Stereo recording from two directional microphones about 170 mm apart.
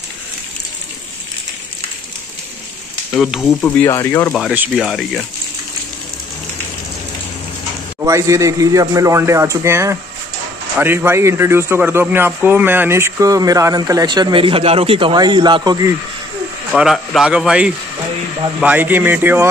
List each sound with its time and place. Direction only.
3.2 s a man's voice: 5° right (ahead or behind)
3.6 s speech: 15° left (ahead or behind)
4.3 s a man's voice: centre (ahead or behind)
8.0 s a man's voice: 20° right (ahead or behind)
16.7 s a man's voice: centre (ahead or behind)